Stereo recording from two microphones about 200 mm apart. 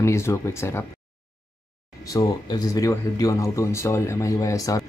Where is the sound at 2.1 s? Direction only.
15° left (ahead or behind).